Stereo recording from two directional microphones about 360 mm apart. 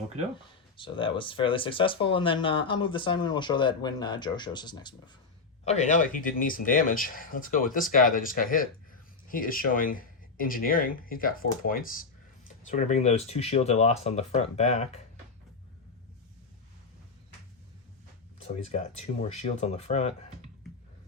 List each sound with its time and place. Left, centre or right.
0.8 s speech: centre
18.6 s speech: centre